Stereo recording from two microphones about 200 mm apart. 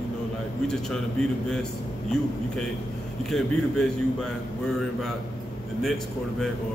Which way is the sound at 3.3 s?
Centre (ahead or behind).